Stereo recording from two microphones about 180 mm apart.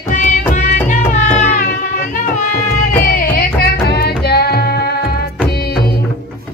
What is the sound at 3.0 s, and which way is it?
Music, 50° left (ahead or behind).